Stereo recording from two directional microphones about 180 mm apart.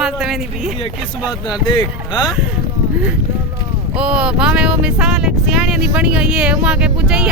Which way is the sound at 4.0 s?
5° right (ahead or behind).